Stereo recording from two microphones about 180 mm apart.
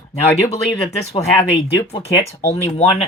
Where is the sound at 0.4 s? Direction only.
35° left (ahead or behind).